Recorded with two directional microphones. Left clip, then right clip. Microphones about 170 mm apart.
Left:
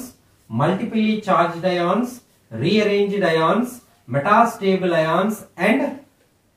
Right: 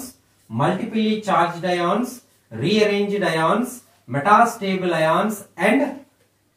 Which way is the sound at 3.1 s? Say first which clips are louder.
Left 2 dB; 20° left (ahead or behind).